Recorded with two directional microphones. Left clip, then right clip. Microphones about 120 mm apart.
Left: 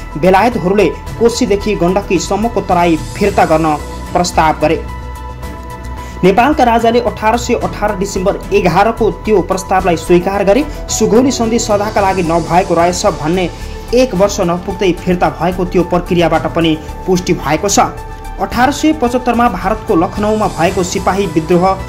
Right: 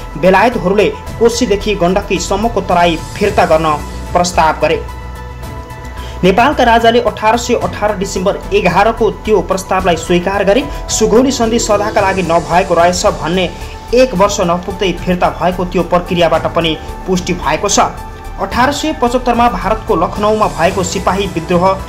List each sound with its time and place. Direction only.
0.2 s speech: 40° left (ahead or behind)
3.5 s speech: 30° left (ahead or behind)
4.2 s speech: 40° left (ahead or behind)
6.2 s speech: 40° left (ahead or behind)